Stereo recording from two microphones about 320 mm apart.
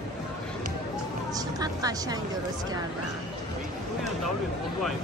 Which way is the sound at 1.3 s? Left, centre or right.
Centre.